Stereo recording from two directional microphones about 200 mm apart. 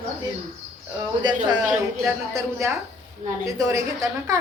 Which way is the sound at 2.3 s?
15° right (ahead or behind).